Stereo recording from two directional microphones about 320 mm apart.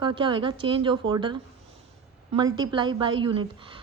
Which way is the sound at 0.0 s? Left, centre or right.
Centre.